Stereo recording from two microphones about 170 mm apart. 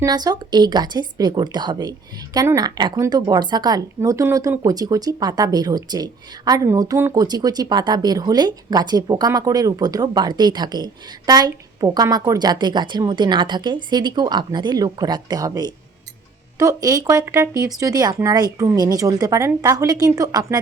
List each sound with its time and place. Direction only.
0.0 s speech: 25° right (ahead or behind)